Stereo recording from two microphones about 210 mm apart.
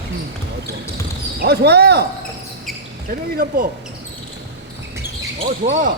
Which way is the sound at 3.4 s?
45° right (ahead or behind).